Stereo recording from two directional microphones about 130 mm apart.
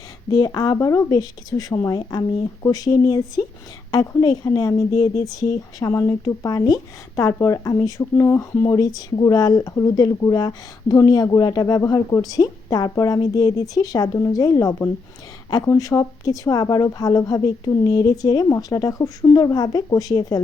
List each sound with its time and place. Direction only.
0.3 s speech: 35° left (ahead or behind)